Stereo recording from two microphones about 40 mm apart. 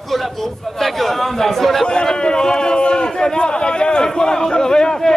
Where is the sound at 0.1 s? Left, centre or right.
Centre.